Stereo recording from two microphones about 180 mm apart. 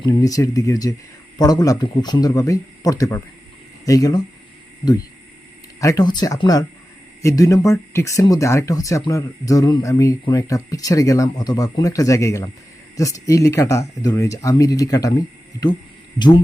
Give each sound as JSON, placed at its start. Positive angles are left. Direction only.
{"t": 0.0, "sound": "speech", "side_deg": 20}
{"t": 5.8, "sound": "speech", "side_deg": 20}
{"t": 16.1, "sound": "speech", "side_deg": 25}